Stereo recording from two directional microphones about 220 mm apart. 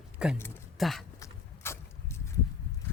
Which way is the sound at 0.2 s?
5° right (ahead or behind).